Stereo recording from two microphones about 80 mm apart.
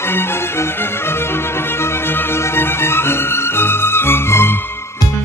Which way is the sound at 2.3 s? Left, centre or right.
Left.